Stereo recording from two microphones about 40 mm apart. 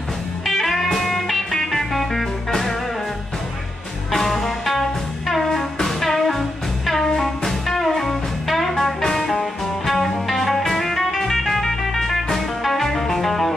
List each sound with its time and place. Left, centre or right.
0.5 s music: centre
4.1 s music: centre